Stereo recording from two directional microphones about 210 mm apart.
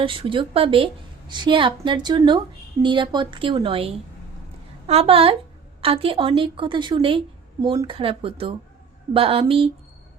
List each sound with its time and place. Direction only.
0.0 s a woman's voice: 25° right (ahead or behind)